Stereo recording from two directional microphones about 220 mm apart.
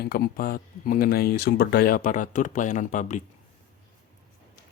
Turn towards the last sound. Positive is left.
turn(degrees=35)  # may be behind; listen again after turning